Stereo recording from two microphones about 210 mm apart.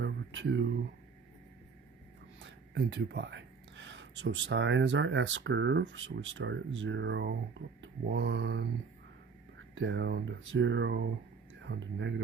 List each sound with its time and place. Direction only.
0.0 s a sound: 60° right (ahead or behind)
2.4 s speech: 55° right (ahead or behind)
9.6 s speech: 65° right (ahead or behind)